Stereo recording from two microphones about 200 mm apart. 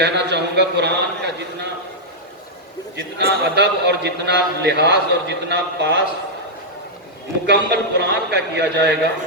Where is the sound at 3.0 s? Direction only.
60° right (ahead or behind).